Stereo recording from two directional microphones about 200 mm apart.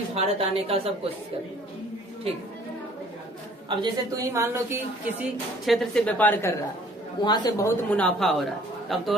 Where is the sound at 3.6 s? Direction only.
20° right (ahead or behind).